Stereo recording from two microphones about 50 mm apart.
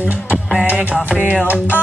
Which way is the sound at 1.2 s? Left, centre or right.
Right.